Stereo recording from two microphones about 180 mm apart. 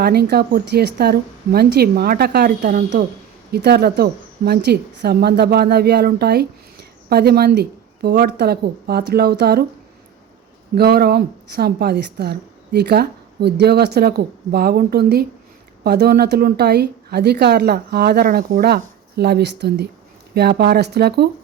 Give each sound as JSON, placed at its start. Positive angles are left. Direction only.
{"t": 0.0, "sound": "speech", "side_deg": -60}
{"t": 10.8, "sound": "speech", "side_deg": -60}